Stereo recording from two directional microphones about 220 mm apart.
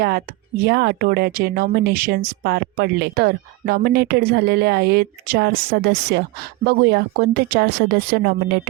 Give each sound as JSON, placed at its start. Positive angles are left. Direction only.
{"t": 0.0, "sound": "speech", "side_deg": -45}